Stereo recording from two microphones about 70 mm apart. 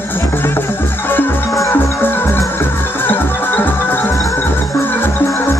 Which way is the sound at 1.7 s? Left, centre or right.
Left.